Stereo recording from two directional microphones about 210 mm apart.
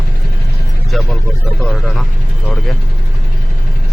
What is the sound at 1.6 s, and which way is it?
Speech, centre (ahead or behind).